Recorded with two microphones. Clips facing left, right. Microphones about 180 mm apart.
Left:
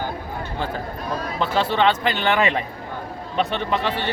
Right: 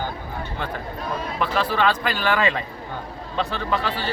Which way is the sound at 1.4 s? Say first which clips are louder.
Left 2 dB; 25° left (ahead or behind).